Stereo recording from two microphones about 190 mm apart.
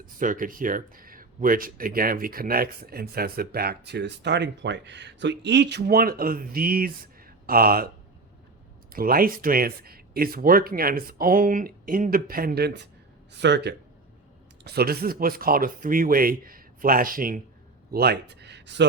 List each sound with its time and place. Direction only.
0.0 s speech: 45° right (ahead or behind)
8.9 s speech: 50° right (ahead or behind); by 18.9 s 65° right (ahead or behind)